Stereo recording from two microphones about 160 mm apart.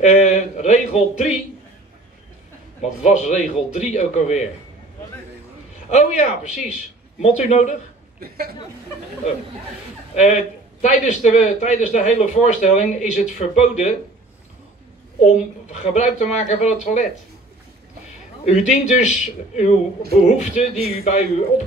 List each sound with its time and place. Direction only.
0.0 s a sound: 50° left (ahead or behind)
3.0 s a man's voice: 50° left (ahead or behind)
5.9 s a man's voice: 45° left (ahead or behind)
8.2 s a woman's voice: 70° right (ahead or behind)
10.1 s a man's voice: 50° left (ahead or behind)
15.2 s a man's voice: 45° left (ahead or behind)
18.4 s a man's voice: 50° left (ahead or behind)